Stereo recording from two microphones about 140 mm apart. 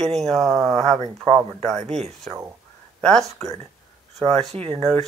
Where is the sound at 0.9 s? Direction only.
50° right (ahead or behind).